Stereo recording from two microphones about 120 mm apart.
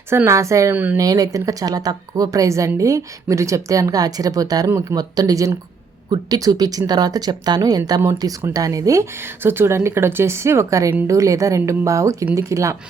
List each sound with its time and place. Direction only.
0.3 s a woman's voice: 25° right (ahead or behind)